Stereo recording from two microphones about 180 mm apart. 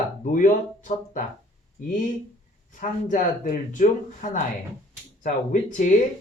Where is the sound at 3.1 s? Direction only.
45° left (ahead or behind).